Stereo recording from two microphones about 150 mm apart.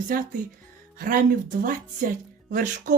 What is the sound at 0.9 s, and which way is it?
Speech, 65° right (ahead or behind).